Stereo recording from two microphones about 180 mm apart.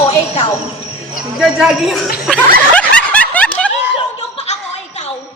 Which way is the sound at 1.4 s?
Centre (ahead or behind).